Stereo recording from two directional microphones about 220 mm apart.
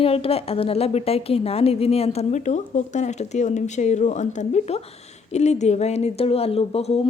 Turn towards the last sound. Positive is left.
turn(degrees=25)  # may be behind; listen again after turning